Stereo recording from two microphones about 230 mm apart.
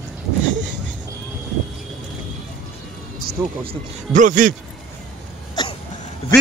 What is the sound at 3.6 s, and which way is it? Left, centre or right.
Speech, right.